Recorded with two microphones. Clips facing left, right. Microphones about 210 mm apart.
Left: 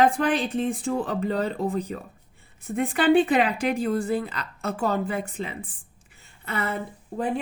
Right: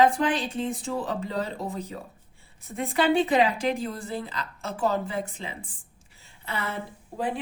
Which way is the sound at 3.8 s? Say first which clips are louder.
Left 8 dB; 55° left (ahead or behind).